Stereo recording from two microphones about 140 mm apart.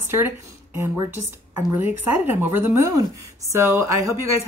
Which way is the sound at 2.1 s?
15° right (ahead or behind).